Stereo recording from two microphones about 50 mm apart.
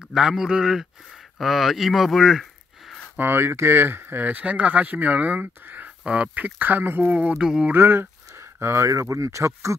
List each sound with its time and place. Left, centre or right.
0.1 s speech: centre
3.2 s speech: right
4.2 s speech: right
6.0 s speech: right
7.3 s speech: centre
7.7 s speech: right
8.4 s speech: right